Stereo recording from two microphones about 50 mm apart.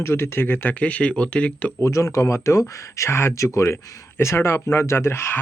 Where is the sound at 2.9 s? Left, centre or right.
Left.